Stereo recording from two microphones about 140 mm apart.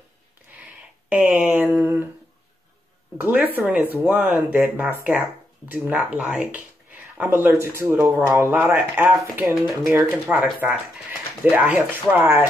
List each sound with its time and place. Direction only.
1.0 s a sound: 10° right (ahead or behind)
3.2 s speech: 10° right (ahead or behind)
9.4 s speech: centre (ahead or behind)
10.4 s speech: 10° right (ahead or behind)